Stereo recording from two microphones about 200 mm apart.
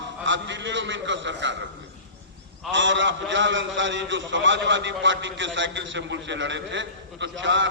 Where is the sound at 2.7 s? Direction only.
65° right (ahead or behind).